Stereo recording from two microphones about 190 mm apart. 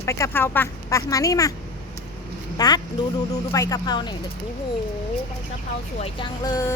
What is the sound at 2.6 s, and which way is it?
Speech, 20° left (ahead or behind).